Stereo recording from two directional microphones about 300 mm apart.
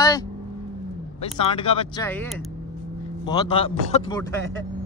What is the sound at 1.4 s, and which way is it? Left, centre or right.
Speech, centre.